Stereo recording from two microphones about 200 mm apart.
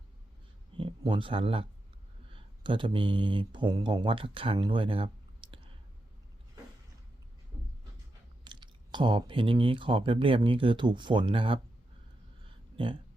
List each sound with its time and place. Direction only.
0.8 s speech: 25° right (ahead or behind)
8.4 s speech: 25° right (ahead or behind)
12.5 s a sound: 25° right (ahead or behind)